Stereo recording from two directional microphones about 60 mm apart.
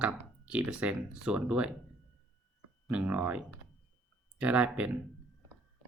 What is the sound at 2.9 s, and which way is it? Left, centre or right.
Speech, right.